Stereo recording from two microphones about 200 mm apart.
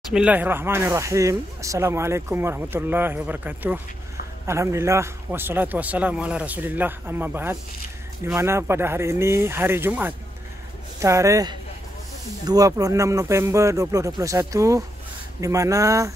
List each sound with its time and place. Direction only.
0.1 s speech: 5° right (ahead or behind)